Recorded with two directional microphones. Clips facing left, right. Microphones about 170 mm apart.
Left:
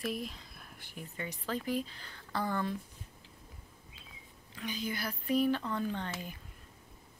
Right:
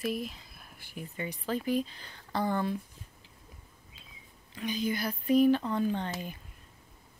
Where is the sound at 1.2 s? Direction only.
15° right (ahead or behind).